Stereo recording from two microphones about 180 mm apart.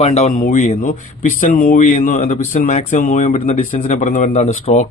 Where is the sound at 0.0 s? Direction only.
35° left (ahead or behind).